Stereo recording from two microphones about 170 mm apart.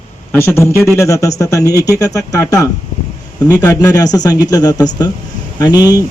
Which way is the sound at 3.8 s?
20° left (ahead or behind).